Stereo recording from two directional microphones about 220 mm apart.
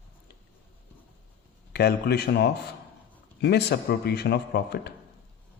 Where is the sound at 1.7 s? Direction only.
45° left (ahead or behind).